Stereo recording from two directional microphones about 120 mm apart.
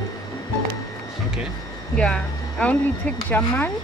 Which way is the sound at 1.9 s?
10° left (ahead or behind).